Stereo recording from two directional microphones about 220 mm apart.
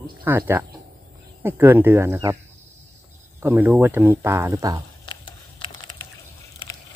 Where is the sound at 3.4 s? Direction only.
10° right (ahead or behind).